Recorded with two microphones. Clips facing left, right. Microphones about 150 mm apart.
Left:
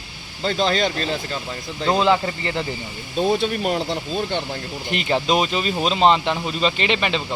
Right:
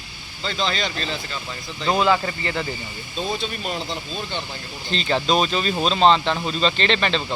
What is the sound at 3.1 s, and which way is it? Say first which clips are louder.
Speech: left 7 dB; 60° left (ahead or behind).